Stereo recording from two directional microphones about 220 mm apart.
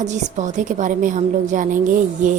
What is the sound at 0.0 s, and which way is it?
A woman's voice, 30° right (ahead or behind).